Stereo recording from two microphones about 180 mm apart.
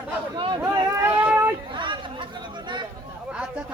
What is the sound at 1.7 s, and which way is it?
Speech, 25° right (ahead or behind).